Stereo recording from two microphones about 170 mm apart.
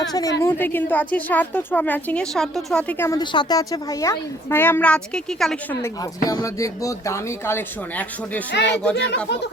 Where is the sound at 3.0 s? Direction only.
20° left (ahead or behind); by 5.8 s 5° left (ahead or behind).